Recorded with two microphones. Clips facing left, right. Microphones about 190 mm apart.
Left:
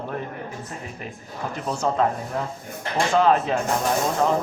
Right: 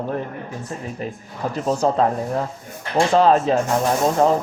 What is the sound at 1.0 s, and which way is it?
Speech, 35° right (ahead or behind).